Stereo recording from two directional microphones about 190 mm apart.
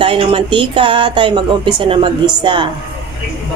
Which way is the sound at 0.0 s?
25° right (ahead or behind).